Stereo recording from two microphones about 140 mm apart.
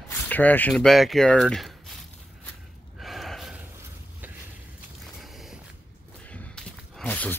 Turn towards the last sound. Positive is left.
turn(degrees=10)  # may be behind; listen again after turning